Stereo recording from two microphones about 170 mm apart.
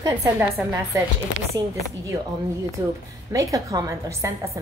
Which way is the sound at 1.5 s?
20° right (ahead or behind).